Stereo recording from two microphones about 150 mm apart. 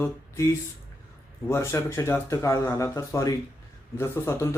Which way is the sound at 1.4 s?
15° left (ahead or behind).